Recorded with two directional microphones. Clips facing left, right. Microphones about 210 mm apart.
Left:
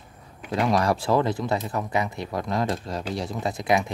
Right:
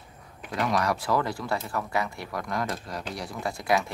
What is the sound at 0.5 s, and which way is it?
Speech, 30° left (ahead or behind).